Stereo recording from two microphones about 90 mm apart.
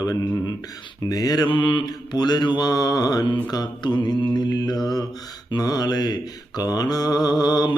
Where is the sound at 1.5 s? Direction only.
65° left (ahead or behind).